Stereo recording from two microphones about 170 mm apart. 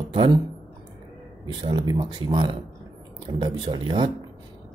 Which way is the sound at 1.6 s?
30° right (ahead or behind).